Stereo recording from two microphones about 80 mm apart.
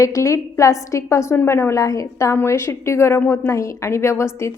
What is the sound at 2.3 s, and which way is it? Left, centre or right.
A woman's voice, left.